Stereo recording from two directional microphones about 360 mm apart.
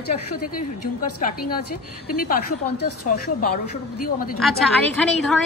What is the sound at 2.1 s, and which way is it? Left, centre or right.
Speech, left.